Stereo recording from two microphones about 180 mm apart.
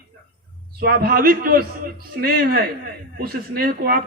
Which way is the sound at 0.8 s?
55° right (ahead or behind).